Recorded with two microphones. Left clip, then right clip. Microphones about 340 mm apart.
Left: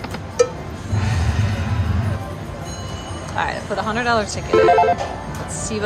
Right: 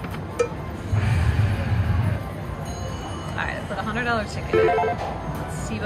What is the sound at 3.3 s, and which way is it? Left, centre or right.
Speech, centre.